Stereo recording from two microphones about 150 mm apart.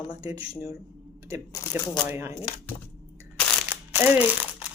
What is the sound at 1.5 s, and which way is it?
Speech, 20° left (ahead or behind).